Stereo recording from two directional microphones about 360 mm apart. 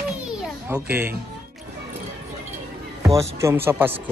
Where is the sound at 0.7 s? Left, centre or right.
Centre.